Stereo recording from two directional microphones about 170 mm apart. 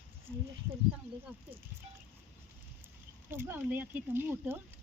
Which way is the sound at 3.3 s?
10° right (ahead or behind).